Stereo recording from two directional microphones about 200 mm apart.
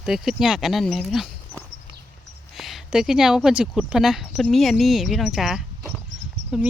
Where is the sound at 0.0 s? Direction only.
Centre (ahead or behind).